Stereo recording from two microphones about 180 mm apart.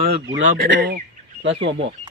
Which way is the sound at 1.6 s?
85° right.